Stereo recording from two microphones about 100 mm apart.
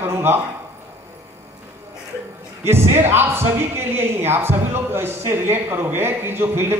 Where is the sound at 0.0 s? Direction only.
25° right (ahead or behind).